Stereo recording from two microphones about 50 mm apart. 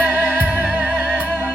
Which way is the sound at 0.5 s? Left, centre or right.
Right.